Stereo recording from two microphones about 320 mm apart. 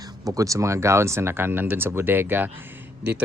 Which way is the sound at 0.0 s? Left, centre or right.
Centre.